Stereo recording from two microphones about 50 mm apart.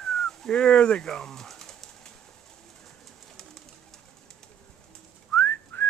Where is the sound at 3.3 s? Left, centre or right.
Centre.